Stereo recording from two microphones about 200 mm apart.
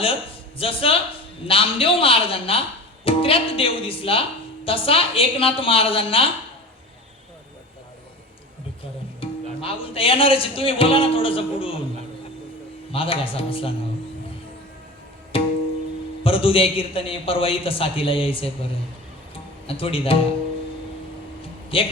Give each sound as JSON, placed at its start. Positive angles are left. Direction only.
{"t": 0.0, "sound": "speech", "side_deg": 30}
{"t": 9.2, "sound": "speech", "side_deg": 25}
{"t": 12.9, "sound": "speech", "side_deg": 25}
{"t": 15.3, "sound": "music", "side_deg": 30}
{"t": 16.2, "sound": "speech", "side_deg": 25}
{"t": 19.3, "sound": "music", "side_deg": 25}
{"t": 21.7, "sound": "speech", "side_deg": 25}